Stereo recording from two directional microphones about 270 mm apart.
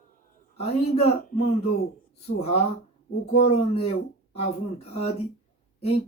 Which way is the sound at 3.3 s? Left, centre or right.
Left.